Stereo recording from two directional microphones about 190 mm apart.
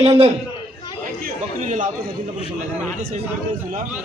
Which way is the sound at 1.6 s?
40° right (ahead or behind).